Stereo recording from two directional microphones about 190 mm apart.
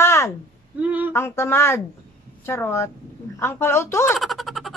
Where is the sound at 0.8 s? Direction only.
5° right (ahead or behind).